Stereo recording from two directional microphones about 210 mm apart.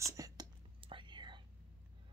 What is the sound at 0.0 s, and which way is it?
Whispering, 15° right (ahead or behind).